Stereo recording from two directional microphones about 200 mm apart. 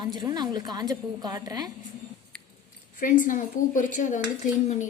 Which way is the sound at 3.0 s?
40° left (ahead or behind).